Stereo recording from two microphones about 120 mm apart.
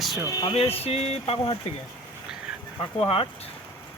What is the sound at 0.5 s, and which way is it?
Speech, 55° left (ahead or behind).